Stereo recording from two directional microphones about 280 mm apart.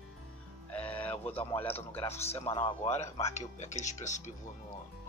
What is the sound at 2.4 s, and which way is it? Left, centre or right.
Speech, centre.